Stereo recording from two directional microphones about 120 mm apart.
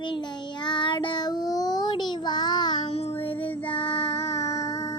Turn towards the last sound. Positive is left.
turn(degrees=25)  # may be behind; listen again after turning